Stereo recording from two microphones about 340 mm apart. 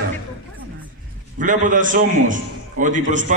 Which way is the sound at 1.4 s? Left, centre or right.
Right.